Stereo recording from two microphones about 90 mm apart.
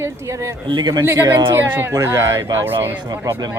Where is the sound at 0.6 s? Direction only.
60° right (ahead or behind).